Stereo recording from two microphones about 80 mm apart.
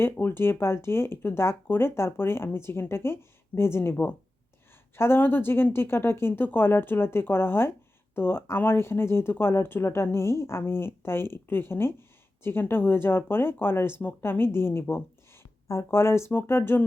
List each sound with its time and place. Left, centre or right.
0.0 s speech: left